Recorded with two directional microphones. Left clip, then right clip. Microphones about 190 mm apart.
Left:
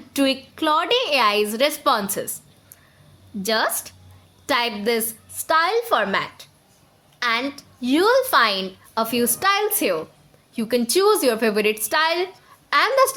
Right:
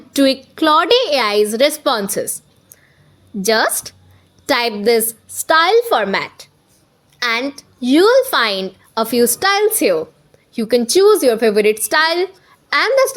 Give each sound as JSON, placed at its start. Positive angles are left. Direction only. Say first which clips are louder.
{"t": 0.1, "sound": "a woman's voice", "louder": "right 7 dB", "side_deg": -30}
{"t": 3.4, "sound": "a woman's voice", "louder": "right 6 dB", "side_deg": -30}